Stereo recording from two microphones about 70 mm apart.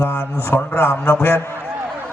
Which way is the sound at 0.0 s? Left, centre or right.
Left.